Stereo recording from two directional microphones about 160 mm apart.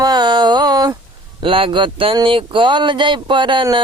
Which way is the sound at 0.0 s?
25° right (ahead or behind).